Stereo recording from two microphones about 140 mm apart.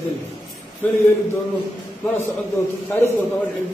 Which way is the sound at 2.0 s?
20° left (ahead or behind).